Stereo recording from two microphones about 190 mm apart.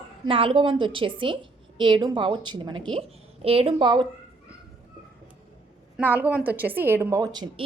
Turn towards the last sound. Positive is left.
turn(degrees=-20)  # may be behind; listen again after turning